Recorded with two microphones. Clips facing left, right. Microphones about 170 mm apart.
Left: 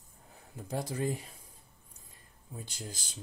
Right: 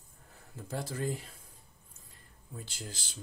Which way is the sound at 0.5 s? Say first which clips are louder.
Left 2 dB; 15° left (ahead or behind).